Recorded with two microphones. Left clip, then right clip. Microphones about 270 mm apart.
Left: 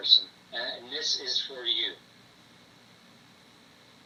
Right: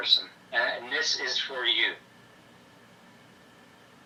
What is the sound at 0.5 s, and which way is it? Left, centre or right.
A man's voice, centre.